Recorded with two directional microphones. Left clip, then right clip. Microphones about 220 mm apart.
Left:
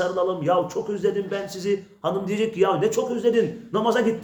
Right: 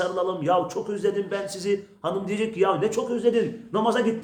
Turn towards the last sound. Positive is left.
turn(degrees=0)  # may be behind; listen again after turning